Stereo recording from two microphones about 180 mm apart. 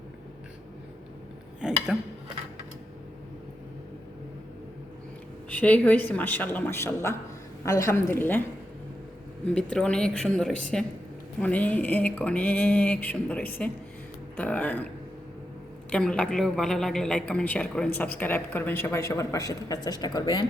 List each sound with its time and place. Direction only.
1.6 s a woman's voice: 5° right (ahead or behind)
5.5 s speech: 10° left (ahead or behind)
9.6 s a woman's voice: 5° left (ahead or behind)
15.9 s a woman's voice: 5° left (ahead or behind); by 20.4 s 25° left (ahead or behind)